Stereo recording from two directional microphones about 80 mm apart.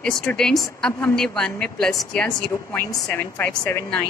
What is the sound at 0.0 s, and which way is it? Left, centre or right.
A woman's voice, centre.